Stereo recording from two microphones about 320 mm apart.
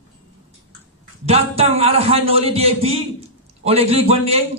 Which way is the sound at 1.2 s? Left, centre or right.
Centre.